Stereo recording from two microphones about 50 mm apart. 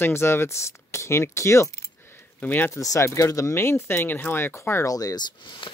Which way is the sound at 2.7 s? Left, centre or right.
Left.